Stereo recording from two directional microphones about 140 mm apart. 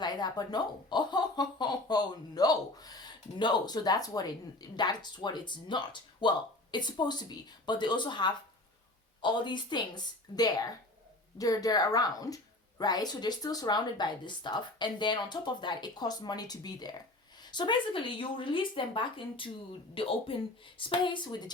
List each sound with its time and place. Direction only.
0.0 s a woman's voice: 30° left (ahead or behind)